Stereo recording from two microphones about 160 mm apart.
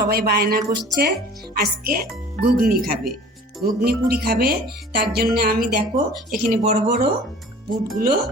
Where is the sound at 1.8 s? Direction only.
65° right (ahead or behind).